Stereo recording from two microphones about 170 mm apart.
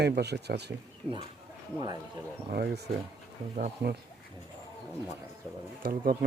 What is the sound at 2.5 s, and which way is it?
Speech, 70° right (ahead or behind).